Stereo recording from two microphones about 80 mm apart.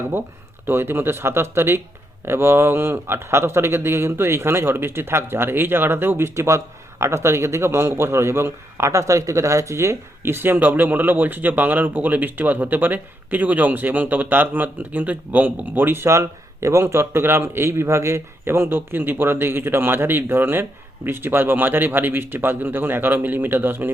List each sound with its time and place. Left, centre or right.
0.7 s a man's voice: right